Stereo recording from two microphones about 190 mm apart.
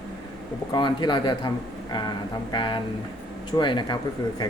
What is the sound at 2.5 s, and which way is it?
A man's voice, 25° left (ahead or behind).